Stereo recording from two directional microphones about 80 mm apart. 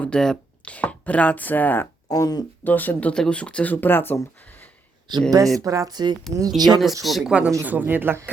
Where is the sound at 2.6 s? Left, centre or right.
Left.